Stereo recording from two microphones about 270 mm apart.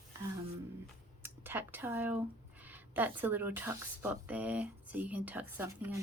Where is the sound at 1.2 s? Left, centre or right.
Centre.